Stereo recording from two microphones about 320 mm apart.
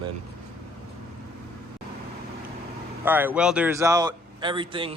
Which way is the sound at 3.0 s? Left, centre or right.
Centre.